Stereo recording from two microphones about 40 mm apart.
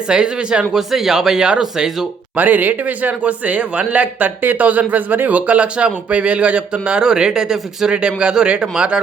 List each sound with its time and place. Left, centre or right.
0.1 s speech: right
0.8 s speech: centre
2.3 s speech: right